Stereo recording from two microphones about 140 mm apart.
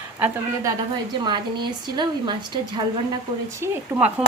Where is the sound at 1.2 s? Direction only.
35° right (ahead or behind).